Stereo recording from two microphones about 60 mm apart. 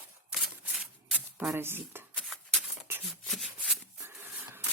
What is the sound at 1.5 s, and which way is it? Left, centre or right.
Speech, right.